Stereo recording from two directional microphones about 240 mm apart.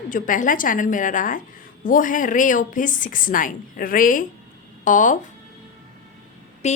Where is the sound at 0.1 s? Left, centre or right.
Left.